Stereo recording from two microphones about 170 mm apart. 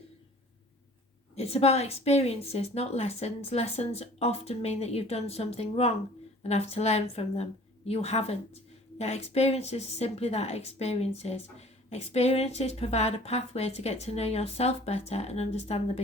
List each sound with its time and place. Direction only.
1.4 s a woman's voice: 35° left (ahead or behind)